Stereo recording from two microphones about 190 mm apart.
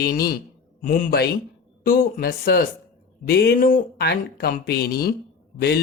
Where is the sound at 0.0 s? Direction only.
50° left (ahead or behind).